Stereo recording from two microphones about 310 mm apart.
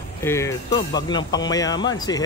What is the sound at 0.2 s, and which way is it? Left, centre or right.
Speech, centre.